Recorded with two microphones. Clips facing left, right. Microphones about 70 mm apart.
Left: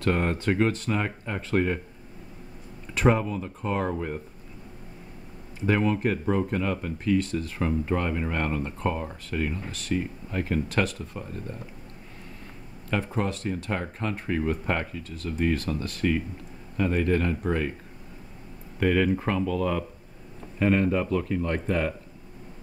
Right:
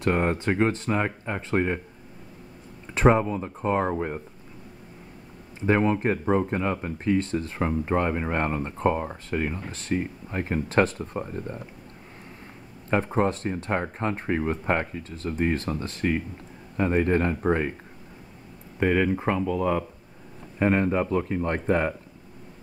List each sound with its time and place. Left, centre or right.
0.0 s speech: right
2.9 s speech: right
5.7 s speech: right
12.9 s speech: right
18.8 s speech: right